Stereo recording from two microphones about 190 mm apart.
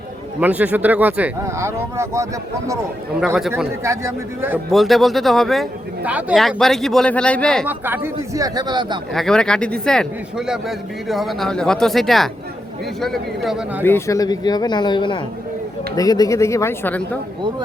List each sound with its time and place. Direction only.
0.3 s speech: 10° right (ahead or behind)
3.2 s a man's voice: 5° right (ahead or behind)
3.8 s speech: 15° right (ahead or behind)
4.7 s a man's voice: centre (ahead or behind)
7.7 s speech: 10° right (ahead or behind)
9.1 s a man's voice: 5° left (ahead or behind)
13.8 s speech: 15° left (ahead or behind)